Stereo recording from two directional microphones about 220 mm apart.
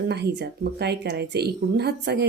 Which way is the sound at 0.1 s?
50° right (ahead or behind).